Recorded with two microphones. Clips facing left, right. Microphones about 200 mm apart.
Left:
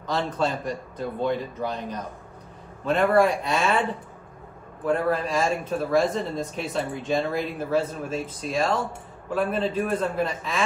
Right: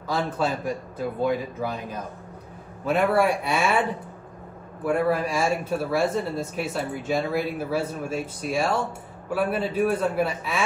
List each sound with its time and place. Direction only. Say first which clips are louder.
0.1 s speech: even; 5° right (ahead or behind)
4.8 s speech: right 1 dB; 10° right (ahead or behind)